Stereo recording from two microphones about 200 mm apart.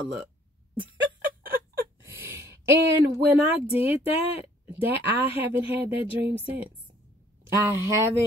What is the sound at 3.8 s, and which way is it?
Speech, 30° left (ahead or behind).